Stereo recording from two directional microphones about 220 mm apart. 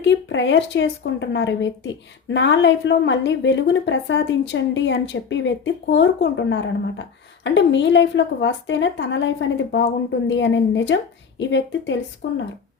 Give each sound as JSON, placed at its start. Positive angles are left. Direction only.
{"t": 0.0, "sound": "a woman's voice", "side_deg": 55}